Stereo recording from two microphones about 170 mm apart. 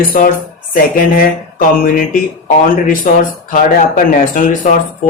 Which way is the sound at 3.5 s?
50° left (ahead or behind).